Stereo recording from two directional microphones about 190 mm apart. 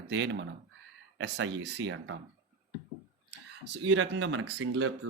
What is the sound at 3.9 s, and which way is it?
Speech, 85° right.